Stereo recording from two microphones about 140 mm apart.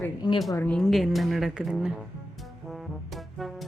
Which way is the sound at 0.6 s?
5° left (ahead or behind).